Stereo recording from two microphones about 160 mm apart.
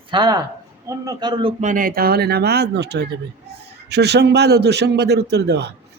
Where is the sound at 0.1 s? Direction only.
25° right (ahead or behind).